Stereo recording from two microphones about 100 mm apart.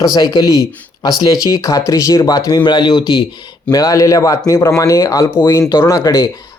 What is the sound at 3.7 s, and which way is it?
Speech, 35° left (ahead or behind).